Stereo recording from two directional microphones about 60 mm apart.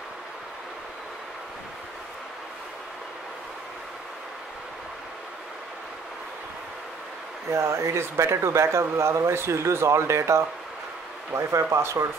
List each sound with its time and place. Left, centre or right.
7.5 s speech: right